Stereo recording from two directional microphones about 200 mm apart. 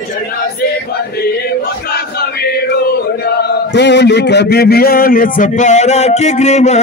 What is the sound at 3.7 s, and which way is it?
A man's voice, 60° left (ahead or behind).